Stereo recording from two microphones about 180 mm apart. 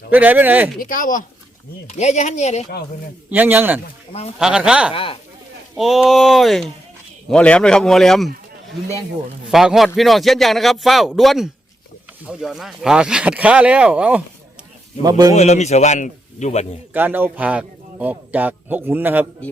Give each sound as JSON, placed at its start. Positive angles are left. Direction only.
{"t": 0.1, "sound": "speech", "side_deg": -10}
{"t": 0.8, "sound": "a man's voice", "side_deg": 50}
{"t": 3.2, "sound": "speech", "side_deg": -10}
{"t": 4.9, "sound": "speech", "side_deg": 30}
{"t": 5.7, "sound": "speech", "side_deg": 0}
{"t": 9.5, "sound": "speech", "side_deg": 0}
{"t": 15.0, "sound": "speech", "side_deg": -20}
{"t": 15.4, "sound": "a man's voice", "side_deg": 40}
{"t": 16.9, "sound": "speech", "side_deg": -10}